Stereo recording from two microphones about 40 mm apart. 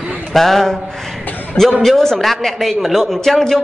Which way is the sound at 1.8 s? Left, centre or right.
Centre.